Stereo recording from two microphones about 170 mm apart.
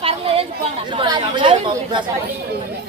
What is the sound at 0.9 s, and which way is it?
Chatter, 25° right (ahead or behind).